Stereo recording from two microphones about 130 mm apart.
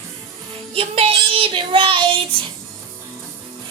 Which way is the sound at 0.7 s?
50° right (ahead or behind).